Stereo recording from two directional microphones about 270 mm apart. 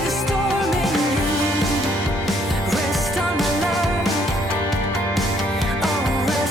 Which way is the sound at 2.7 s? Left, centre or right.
Centre.